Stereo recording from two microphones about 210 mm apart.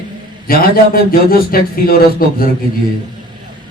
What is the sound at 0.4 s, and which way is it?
A man's voice, 45° left (ahead or behind).